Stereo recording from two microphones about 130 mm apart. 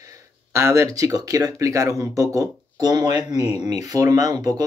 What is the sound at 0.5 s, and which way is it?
Speech, 20° right (ahead or behind).